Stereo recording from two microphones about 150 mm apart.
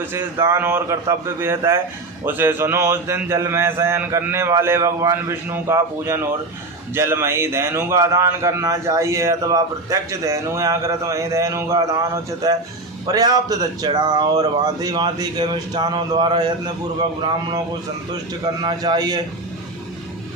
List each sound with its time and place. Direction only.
0.0 s a man's voice: 15° right (ahead or behind)
18.4 s a man's voice: 30° right (ahead or behind)